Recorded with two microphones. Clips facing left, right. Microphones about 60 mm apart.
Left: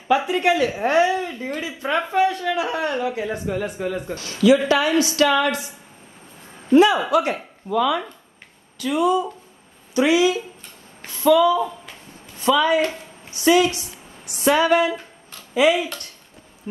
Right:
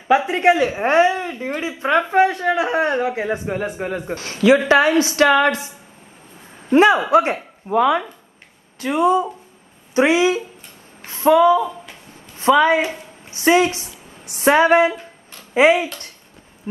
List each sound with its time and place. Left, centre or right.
0.1 s a woman's voice: right